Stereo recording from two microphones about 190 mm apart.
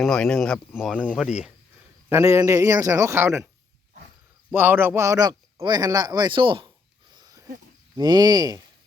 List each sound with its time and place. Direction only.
0.0 s speech: 5° left (ahead or behind)
2.0 s a man's voice: 15° right (ahead or behind)
4.5 s a man's voice: 10° right (ahead or behind); by 6.7 s 25° right (ahead or behind)
7.1 s a sound: 20° right (ahead or behind)
7.9 s a man's voice: 20° right (ahead or behind)